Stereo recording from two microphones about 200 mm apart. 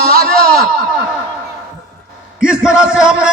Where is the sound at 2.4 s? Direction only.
5° right (ahead or behind).